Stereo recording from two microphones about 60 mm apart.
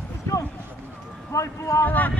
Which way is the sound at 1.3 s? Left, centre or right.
Left.